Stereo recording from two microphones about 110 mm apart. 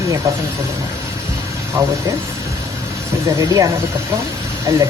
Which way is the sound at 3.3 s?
30° right (ahead or behind).